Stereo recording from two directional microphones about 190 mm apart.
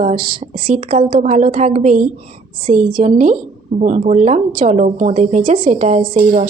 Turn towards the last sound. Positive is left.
turn(degrees=-40)  # may be behind; listen again after turning